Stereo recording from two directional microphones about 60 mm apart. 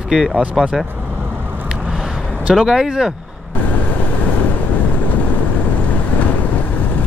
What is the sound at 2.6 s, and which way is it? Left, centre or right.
Speech, centre.